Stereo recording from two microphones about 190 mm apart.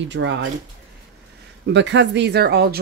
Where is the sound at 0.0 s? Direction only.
75° right (ahead or behind).